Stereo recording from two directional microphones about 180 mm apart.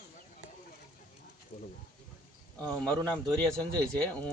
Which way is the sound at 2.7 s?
5° left (ahead or behind).